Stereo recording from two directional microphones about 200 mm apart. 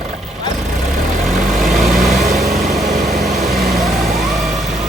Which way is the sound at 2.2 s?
40° right (ahead or behind).